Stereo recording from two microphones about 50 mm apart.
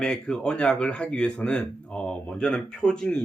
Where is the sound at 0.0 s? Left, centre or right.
Centre.